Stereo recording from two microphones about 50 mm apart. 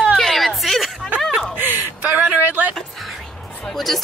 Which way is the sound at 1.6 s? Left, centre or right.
Right.